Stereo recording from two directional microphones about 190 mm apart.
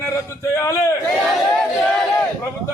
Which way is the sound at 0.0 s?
15° left (ahead or behind).